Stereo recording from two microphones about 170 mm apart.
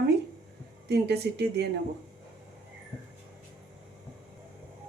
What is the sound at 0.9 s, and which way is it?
Speech, 75° right (ahead or behind).